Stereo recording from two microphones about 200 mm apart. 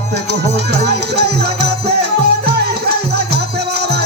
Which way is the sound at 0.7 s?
55° right (ahead or behind).